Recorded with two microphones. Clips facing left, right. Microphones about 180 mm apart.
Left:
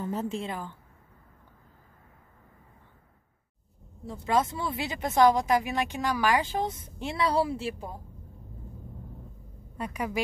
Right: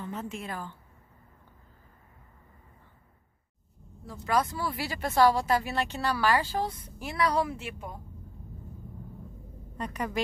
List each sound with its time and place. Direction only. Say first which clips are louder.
0.0 s a woman's voice: left 5 dB; 35° left (ahead or behind)
0.5 s a woman's voice: left 2 dB; 15° left (ahead or behind)
4.0 s speech: left 2 dB; 25° left (ahead or behind)
9.8 s a woman's voice: left 1 dB; 10° left (ahead or behind)